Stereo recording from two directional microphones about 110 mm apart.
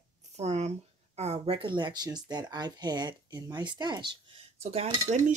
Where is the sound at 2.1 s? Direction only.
40° right (ahead or behind).